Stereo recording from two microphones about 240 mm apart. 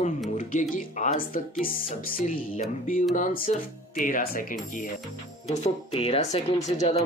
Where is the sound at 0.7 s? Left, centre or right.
Left.